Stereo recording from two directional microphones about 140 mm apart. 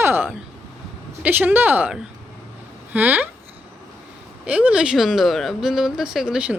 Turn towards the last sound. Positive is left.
turn(degrees=-5)  # may be behind; listen again after turning